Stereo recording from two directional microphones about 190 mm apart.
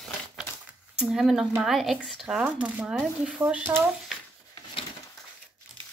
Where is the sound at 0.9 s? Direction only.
5° right (ahead or behind).